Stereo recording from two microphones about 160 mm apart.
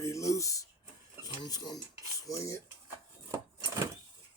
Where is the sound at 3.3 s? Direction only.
20° right (ahead or behind).